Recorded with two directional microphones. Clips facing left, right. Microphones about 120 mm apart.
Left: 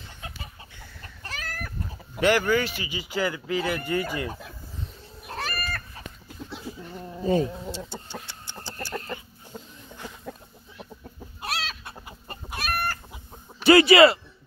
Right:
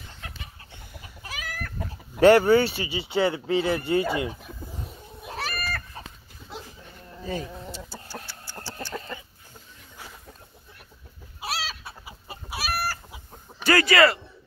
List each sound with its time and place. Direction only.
1.0 s chicken: 10° right (ahead or behind)
2.1 s speech: 35° right (ahead or behind)
5.3 s cat: centre (ahead or behind)
7.2 s insect: 25° left (ahead or behind)
8.3 s chicken: 20° left (ahead or behind)
11.4 s chicken: centre (ahead or behind)
13.7 s speech: 20° left (ahead or behind)